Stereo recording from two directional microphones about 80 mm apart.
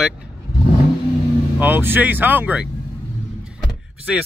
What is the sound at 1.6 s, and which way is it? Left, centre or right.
Speech, right.